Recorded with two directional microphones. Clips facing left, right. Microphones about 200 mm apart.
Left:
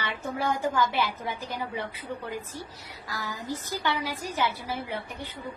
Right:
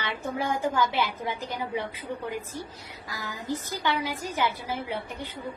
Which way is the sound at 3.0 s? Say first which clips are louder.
Even; 15° right (ahead or behind).